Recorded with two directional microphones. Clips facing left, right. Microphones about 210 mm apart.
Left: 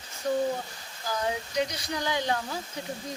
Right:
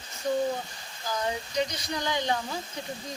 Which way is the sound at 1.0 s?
10° left (ahead or behind).